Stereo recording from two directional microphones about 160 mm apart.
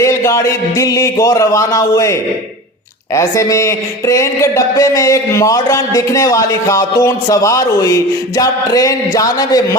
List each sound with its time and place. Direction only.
0.0 s speech: 15° left (ahead or behind)
3.2 s speech: 20° left (ahead or behind)